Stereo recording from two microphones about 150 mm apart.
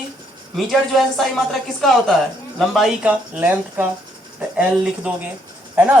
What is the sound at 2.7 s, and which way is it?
A woman's voice, centre (ahead or behind).